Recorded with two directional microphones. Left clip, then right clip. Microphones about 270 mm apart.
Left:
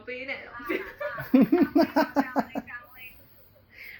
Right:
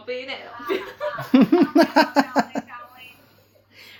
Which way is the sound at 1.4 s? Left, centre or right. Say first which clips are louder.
Right 6 dB; centre.